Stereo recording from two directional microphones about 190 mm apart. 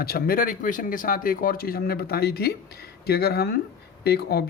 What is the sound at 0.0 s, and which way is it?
Speech, 50° left (ahead or behind).